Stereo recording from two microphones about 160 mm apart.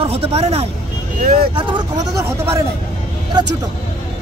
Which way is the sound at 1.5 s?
25° right (ahead or behind).